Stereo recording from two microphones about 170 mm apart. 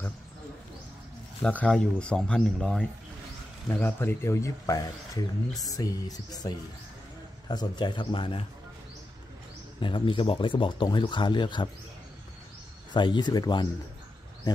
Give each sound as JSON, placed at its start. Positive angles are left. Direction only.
{"t": 1.4, "sound": "speech", "side_deg": 5}
{"t": 9.8, "sound": "speech", "side_deg": 30}
{"t": 12.9, "sound": "speech", "side_deg": 25}